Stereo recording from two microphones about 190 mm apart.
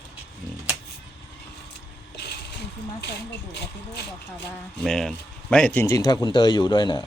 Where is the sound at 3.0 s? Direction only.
60° left (ahead or behind).